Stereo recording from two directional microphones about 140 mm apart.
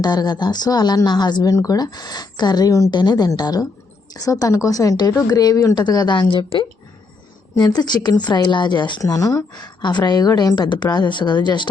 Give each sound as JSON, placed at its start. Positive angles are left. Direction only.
{"t": 0.0, "sound": "a woman's voice", "side_deg": 30}